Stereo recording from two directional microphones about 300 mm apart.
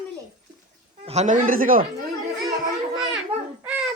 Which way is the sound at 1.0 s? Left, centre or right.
Right.